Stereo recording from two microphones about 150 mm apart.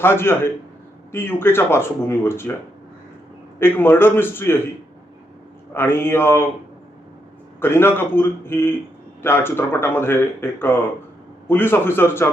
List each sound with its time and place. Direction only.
0.0 s speech: 15° left (ahead or behind)
3.6 s speech: 15° left (ahead or behind)
5.7 s speech: 15° left (ahead or behind)
7.6 s speech: 15° left (ahead or behind)